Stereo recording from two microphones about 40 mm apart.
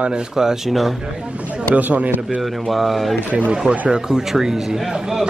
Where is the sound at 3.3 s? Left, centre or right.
Right.